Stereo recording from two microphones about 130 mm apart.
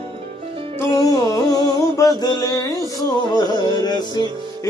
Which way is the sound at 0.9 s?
30° left (ahead or behind).